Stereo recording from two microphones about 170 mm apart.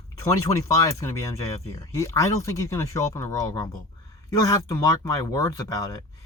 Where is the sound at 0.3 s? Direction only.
20° left (ahead or behind).